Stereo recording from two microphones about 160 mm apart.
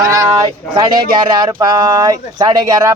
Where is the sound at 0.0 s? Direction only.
20° right (ahead or behind).